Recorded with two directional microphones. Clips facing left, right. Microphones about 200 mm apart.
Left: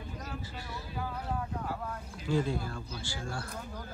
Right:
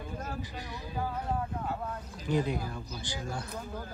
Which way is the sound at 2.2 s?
20° right (ahead or behind).